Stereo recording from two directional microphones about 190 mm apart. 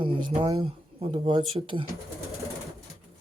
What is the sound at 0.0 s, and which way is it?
Speech, 25° right (ahead or behind).